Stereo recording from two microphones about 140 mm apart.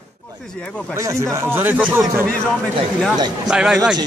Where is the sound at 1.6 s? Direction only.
15° right (ahead or behind).